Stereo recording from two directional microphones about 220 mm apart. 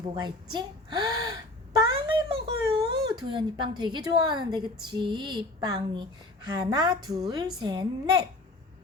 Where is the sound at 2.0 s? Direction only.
20° right (ahead or behind).